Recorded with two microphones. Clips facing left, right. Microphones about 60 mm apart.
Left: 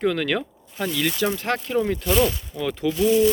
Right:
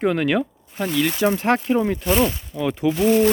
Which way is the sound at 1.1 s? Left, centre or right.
Right.